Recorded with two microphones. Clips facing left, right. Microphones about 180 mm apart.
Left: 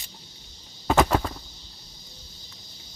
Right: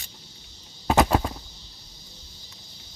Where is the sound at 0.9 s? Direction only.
10° right (ahead or behind).